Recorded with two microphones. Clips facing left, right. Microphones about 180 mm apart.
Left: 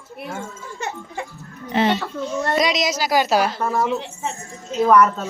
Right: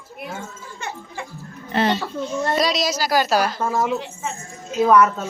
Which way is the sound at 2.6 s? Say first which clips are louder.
Left 2 dB; 20° left (ahead or behind).